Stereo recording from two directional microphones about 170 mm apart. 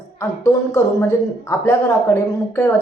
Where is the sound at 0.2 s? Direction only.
20° left (ahead or behind).